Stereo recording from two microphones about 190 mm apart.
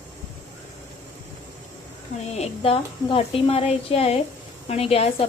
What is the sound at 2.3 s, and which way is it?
Speech, 35° left (ahead or behind).